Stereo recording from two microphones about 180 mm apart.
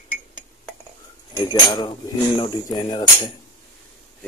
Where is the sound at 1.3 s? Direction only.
25° left (ahead or behind).